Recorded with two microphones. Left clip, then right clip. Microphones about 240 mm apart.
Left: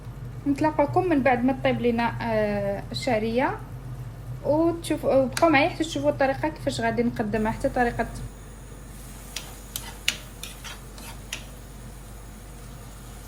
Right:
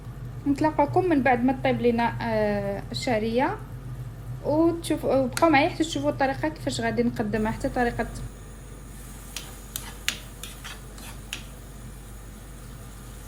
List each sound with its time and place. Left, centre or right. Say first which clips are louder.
0.5 s a woman's voice: even; right
4.6 s a woman's voice: even; right